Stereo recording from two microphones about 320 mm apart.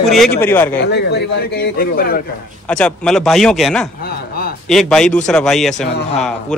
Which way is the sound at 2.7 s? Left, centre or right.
Centre.